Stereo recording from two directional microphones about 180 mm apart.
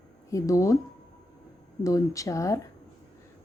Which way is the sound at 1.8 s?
15° left (ahead or behind).